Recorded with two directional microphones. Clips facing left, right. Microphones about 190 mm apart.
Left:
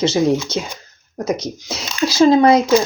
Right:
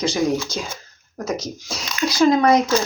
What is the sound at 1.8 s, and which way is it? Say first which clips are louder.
Speech: left 4 dB; 25° left (ahead or behind).